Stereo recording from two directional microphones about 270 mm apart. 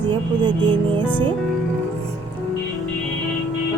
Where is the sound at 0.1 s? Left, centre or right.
Centre.